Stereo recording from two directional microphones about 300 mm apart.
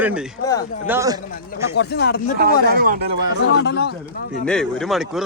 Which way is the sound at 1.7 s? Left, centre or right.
Left.